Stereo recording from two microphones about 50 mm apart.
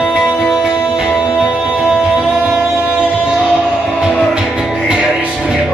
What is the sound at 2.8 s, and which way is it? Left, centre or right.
Music, right.